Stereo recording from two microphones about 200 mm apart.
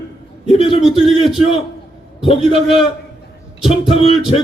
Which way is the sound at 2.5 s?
Centre (ahead or behind).